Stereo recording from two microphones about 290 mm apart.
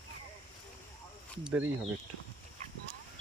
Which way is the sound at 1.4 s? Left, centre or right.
Centre.